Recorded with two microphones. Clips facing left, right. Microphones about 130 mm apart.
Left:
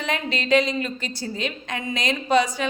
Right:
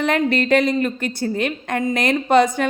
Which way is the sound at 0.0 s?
55° right (ahead or behind).